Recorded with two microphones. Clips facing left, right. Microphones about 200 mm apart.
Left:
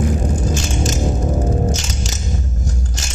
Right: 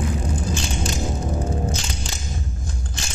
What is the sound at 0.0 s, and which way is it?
Music, 45° left (ahead or behind).